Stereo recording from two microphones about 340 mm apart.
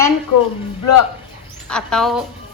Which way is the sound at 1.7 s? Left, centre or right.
Centre.